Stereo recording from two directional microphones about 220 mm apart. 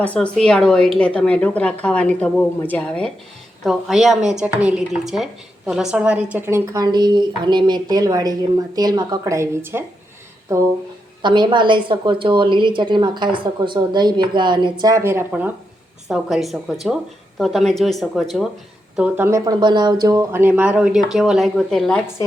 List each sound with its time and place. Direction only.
0.0 s a woman's voice: 5° left (ahead or behind); by 9.8 s 10° right (ahead or behind)
11.2 s a woman's voice: 20° right (ahead or behind); by 22.1 s centre (ahead or behind)